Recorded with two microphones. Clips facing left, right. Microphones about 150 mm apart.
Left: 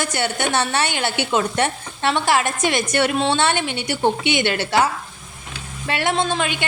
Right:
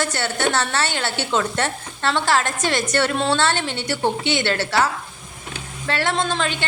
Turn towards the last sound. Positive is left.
turn(degrees=10)  # may be behind; listen again after turning